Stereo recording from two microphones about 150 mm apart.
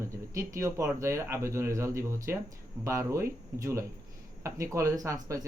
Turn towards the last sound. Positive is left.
turn(degrees=-20)  # may be behind; listen again after turning